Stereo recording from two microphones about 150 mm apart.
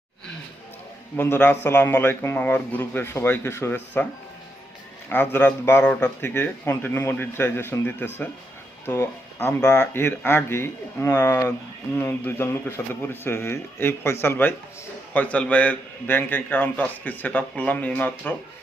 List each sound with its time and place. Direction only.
1.1 s a man's voice: 15° left (ahead or behind)
5.0 s a man's voice: 10° left (ahead or behind)